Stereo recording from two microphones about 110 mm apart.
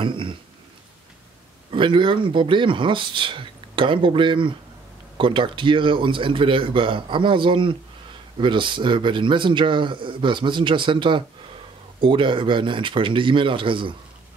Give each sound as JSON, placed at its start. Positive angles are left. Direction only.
{"t": 0.0, "sound": "speech", "side_deg": -50}
{"t": 1.7, "sound": "speech", "side_deg": -50}